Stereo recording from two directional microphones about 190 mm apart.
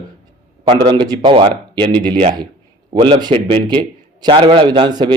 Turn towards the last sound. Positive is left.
turn(degrees=-25)  # may be behind; listen again after turning